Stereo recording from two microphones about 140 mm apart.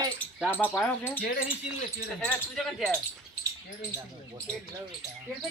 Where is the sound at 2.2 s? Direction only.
5° left (ahead or behind).